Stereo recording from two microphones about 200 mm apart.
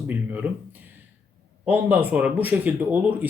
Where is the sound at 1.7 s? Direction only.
10° right (ahead or behind).